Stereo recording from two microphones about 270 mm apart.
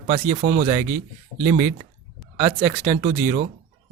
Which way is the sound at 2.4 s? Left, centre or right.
Right.